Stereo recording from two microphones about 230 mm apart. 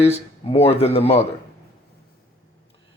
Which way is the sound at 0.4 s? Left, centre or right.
Left.